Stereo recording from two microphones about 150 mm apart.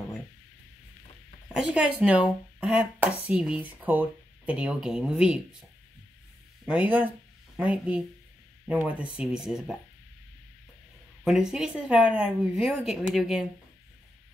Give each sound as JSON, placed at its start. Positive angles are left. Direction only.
{"t": 1.5, "sound": "speech", "side_deg": -5}
{"t": 6.6, "sound": "speech", "side_deg": -10}
{"t": 11.2, "sound": "speech", "side_deg": -5}